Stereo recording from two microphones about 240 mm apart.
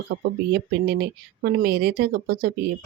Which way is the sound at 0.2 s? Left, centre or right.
Right.